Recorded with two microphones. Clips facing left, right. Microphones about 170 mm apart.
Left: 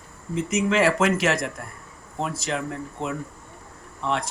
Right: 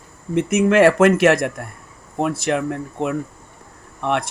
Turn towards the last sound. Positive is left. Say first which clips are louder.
# right 5 dB
turn(degrees=-60)  # may be behind; listen again after turning